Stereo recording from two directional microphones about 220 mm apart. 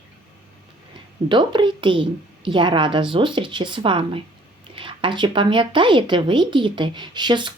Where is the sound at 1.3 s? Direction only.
20° right (ahead or behind).